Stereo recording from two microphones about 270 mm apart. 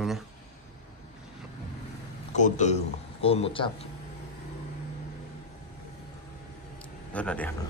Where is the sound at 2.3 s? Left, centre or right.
Left.